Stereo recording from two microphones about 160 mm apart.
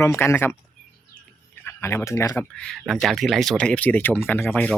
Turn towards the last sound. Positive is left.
turn(degrees=10)  # may be behind; listen again after turning